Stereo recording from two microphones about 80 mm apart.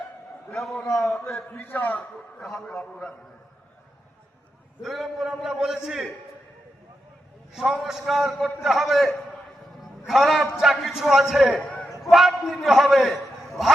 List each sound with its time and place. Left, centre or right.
1.0 s a man's voice: centre
1.5 s a man's voice: left
2.4 s a man's voice: centre
2.7 s a man's voice: centre
4.8 s a man's voice: centre
7.5 s a man's voice: centre
11.6 s a sound: centre
12.0 s a man's voice: centre